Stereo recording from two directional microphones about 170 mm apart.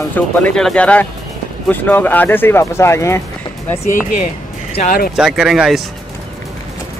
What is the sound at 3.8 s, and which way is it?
Speech, 50° left (ahead or behind).